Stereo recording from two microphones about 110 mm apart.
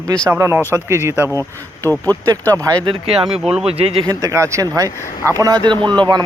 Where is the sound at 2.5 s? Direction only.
30° right (ahead or behind).